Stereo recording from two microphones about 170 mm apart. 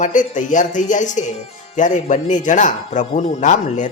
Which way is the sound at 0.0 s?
50° left (ahead or behind).